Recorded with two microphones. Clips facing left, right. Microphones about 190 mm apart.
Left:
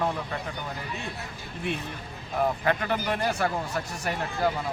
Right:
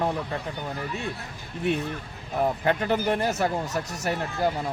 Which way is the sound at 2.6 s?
25° right (ahead or behind).